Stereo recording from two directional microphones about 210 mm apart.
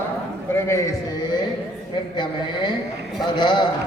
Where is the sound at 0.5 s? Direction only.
10° left (ahead or behind).